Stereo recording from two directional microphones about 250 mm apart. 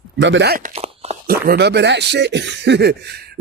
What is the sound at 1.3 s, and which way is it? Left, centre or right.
A man's voice, right.